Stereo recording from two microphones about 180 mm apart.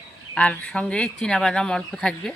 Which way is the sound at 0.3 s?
5° left (ahead or behind).